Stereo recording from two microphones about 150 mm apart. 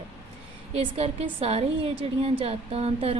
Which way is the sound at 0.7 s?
40° right (ahead or behind).